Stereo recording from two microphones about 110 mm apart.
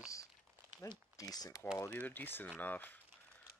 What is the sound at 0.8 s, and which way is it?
Speech, 35° left (ahead or behind).